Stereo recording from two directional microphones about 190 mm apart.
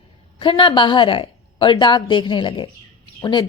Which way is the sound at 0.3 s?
25° left (ahead or behind).